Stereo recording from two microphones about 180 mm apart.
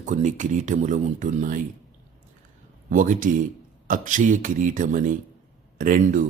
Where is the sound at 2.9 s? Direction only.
45° right (ahead or behind).